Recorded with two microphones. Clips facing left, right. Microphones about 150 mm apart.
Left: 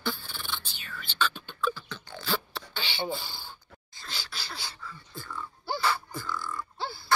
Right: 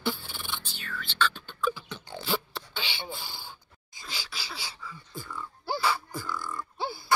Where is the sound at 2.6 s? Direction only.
5° right (ahead or behind).